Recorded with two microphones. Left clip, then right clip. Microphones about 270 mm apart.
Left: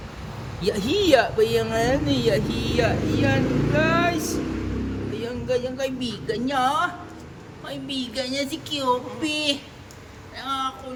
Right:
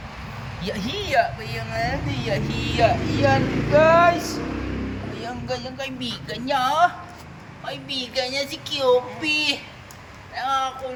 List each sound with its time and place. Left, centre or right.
0.6 s a woman's voice: centre